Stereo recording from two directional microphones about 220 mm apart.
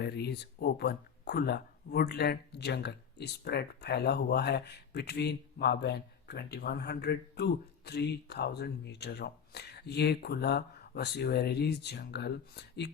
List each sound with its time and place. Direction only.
0.0 s speech: 50° left (ahead or behind)